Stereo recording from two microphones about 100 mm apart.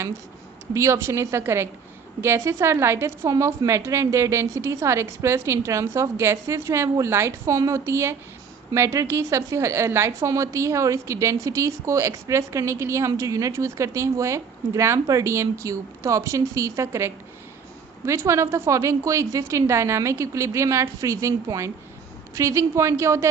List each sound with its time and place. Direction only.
0.7 s a woman's voice: 30° right (ahead or behind)